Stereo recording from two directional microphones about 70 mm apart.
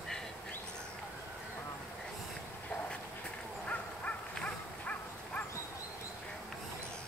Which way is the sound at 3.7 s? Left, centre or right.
Centre.